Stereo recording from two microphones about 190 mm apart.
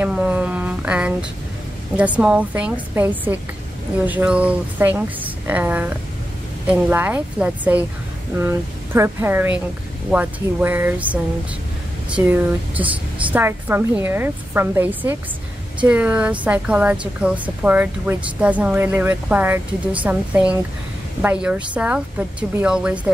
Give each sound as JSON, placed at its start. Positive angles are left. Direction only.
{"t": 0.0, "sound": "a sound", "side_deg": -5}
{"t": 2.0, "sound": "a woman's voice", "side_deg": -5}
{"t": 12.2, "sound": "a woman's voice", "side_deg": -10}